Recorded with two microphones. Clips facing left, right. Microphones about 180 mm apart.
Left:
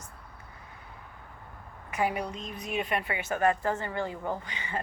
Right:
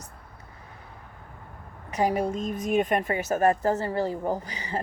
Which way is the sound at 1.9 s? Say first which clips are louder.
Right 5 dB; 40° right (ahead or behind).